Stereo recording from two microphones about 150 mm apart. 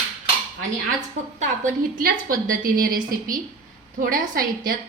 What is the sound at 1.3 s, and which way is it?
A woman's voice, 60° right (ahead or behind).